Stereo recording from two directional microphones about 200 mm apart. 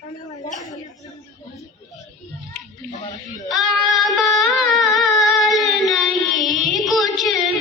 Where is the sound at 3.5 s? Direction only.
Centre (ahead or behind).